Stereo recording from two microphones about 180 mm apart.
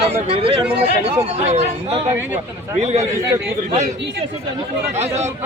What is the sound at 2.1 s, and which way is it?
Speech, 10° right (ahead or behind).